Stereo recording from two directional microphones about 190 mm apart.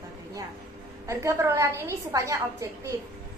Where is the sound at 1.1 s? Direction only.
15° right (ahead or behind).